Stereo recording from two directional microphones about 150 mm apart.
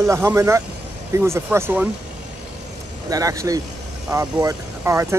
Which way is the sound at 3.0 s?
25° right (ahead or behind).